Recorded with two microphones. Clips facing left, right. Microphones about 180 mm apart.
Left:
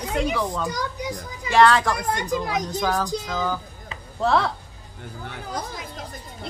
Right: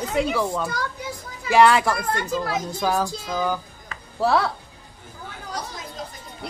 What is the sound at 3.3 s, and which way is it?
Speech, 15° right (ahead or behind).